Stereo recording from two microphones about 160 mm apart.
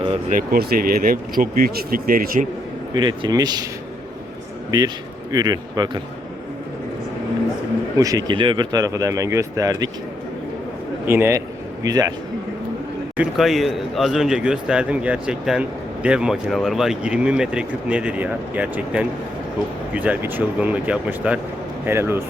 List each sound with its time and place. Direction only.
0.3 s speech: 60° right (ahead or behind)
2.9 s speech: 30° right (ahead or behind)
4.7 s speech: 25° right (ahead or behind)
7.9 s speech: 20° right (ahead or behind)
11.0 s speech: 15° right (ahead or behind)
13.1 s a man's voice: centre (ahead or behind)